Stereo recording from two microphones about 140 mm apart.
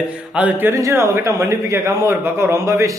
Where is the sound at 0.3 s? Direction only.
10° right (ahead or behind).